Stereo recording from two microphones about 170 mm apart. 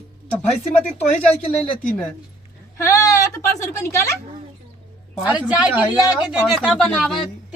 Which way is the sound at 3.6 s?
15° left (ahead or behind).